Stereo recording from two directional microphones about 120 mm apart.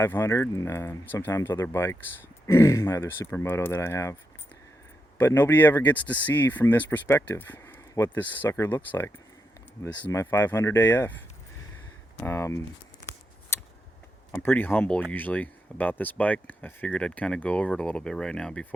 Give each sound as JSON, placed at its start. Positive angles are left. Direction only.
{"t": 0.0, "sound": "speech", "side_deg": 20}
{"t": 12.2, "sound": "speech", "side_deg": 20}
{"t": 13.5, "sound": "a sound", "side_deg": 20}
{"t": 14.3, "sound": "speech", "side_deg": 15}